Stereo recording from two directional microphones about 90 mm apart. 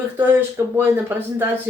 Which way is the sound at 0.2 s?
30° right (ahead or behind).